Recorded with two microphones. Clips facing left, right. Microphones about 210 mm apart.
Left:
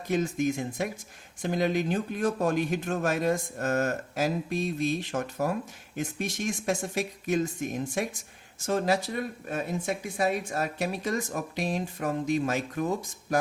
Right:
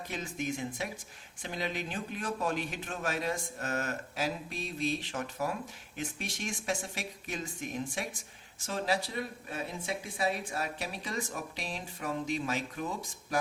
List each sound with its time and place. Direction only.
0.1 s speech: 45° left (ahead or behind)